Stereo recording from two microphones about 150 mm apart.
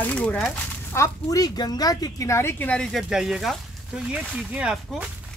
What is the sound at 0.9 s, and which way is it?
Speech, 20° left (ahead or behind).